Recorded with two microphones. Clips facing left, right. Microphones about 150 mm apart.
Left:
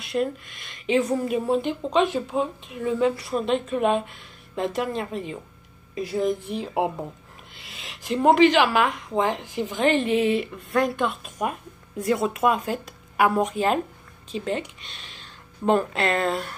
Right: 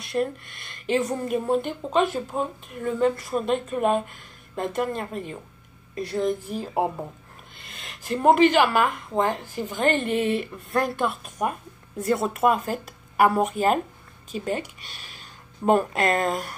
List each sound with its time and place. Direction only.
0.0 s a woman's voice: centre (ahead or behind)
9.3 s speech: 40° right (ahead or behind)
9.6 s a woman's voice: centre (ahead or behind)
15.9 s speech: 40° right (ahead or behind)